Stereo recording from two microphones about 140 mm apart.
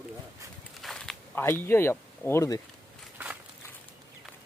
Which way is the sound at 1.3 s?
15° left (ahead or behind).